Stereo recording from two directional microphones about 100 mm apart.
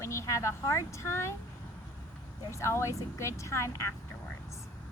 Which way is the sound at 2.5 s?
30° left (ahead or behind).